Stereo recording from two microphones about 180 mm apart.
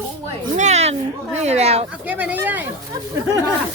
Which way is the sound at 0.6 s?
40° right (ahead or behind).